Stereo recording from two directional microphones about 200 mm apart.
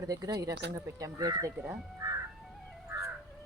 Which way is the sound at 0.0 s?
15° right (ahead or behind).